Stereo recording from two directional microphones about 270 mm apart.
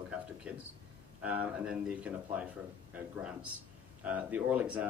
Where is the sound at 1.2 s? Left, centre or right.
Centre.